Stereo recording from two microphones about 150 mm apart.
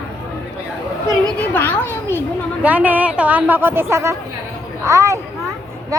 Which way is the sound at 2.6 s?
10° right (ahead or behind).